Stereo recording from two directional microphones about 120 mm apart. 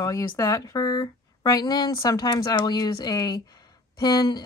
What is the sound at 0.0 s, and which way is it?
Speech, 30° left (ahead or behind).